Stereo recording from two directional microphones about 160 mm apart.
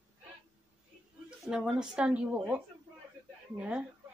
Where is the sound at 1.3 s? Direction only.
5° right (ahead or behind).